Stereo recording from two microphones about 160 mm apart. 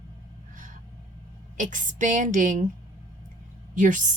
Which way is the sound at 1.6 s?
50° right (ahead or behind).